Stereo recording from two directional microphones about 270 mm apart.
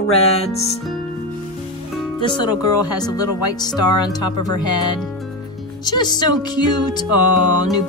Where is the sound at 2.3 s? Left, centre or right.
Centre.